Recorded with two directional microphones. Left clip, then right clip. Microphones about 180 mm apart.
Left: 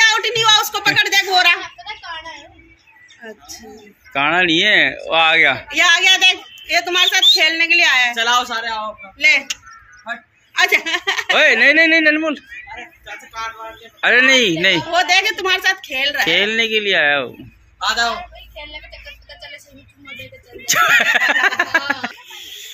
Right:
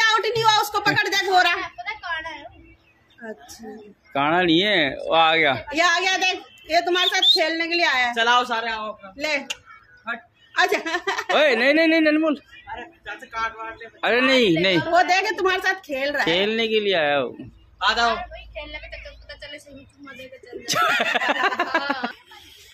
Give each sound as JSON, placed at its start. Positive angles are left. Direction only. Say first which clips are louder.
{"t": 0.0, "sound": "a sound", "louder": "left 5 dB", "side_deg": -35}
{"t": 1.9, "sound": "a sound", "louder": "right 1 dB", "side_deg": 5}
{"t": 4.1, "sound": "speech", "louder": "left 4 dB", "side_deg": -10}
{"t": 5.7, "sound": "a man's voice", "louder": "left 7 dB", "side_deg": -35}
{"t": 8.1, "sound": "speech", "louder": "left 2 dB", "side_deg": -30}
{"t": 9.2, "sound": "a woman's voice", "louder": "left 11 dB", "side_deg": -45}
{"t": 11.3, "sound": "a man's voice", "louder": "left 6 dB", "side_deg": -5}
{"t": 13.3, "sound": "speech", "louder": "even", "side_deg": -25}
{"t": 14.0, "sound": "speech", "louder": "left 6 dB", "side_deg": -5}
{"t": 14.9, "sound": "a woman's voice", "louder": "left 3 dB", "side_deg": -50}
{"t": 16.3, "sound": "a man's voice", "louder": "left 5 dB", "side_deg": 0}
{"t": 18.5, "sound": "a sound", "louder": "left 1 dB", "side_deg": 10}
{"t": 20.6, "sound": "a man's voice", "louder": "left 7 dB", "side_deg": -5}